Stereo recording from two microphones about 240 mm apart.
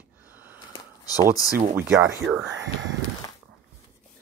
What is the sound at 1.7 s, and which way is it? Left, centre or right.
Speech, centre.